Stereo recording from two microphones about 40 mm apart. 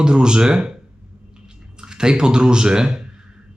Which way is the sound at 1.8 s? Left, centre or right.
Centre.